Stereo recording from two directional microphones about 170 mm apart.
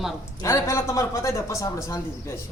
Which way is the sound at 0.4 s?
15° left (ahead or behind).